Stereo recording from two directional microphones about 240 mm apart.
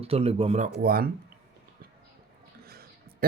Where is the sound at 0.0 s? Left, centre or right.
Right.